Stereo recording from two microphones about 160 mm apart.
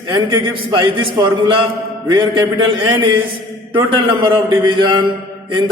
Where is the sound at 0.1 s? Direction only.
30° right (ahead or behind).